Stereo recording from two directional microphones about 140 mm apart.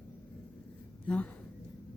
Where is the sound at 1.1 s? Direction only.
10° left (ahead or behind).